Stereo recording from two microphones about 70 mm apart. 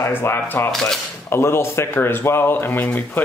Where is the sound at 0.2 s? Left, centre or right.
Left.